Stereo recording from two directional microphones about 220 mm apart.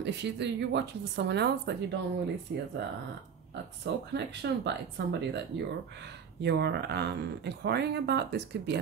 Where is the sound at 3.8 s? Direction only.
50° right (ahead or behind).